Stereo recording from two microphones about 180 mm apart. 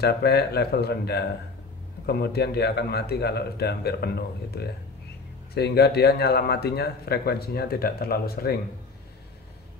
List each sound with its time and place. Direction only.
0.0 s speech: 65° left (ahead or behind)